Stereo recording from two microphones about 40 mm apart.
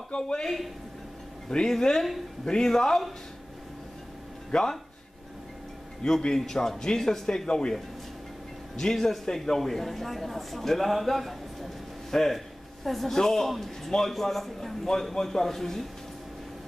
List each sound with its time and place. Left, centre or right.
0.1 s speech: left
1.7 s a man's voice: centre
4.5 s speech: centre
6.0 s a man's voice: centre
8.7 s a man's voice: centre